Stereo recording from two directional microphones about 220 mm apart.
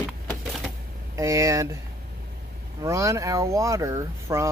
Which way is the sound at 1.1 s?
15° right (ahead or behind).